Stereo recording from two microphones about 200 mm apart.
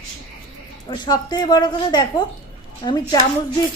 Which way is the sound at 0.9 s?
20° left (ahead or behind).